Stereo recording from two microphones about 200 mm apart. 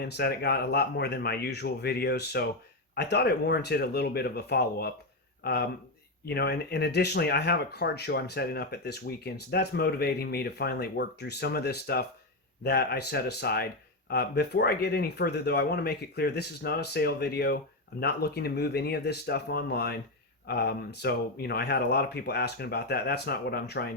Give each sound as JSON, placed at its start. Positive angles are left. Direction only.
{"t": 0.0, "sound": "speech", "side_deg": 55}